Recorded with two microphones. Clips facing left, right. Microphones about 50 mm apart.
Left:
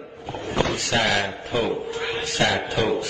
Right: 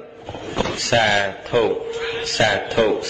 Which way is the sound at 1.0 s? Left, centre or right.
Right.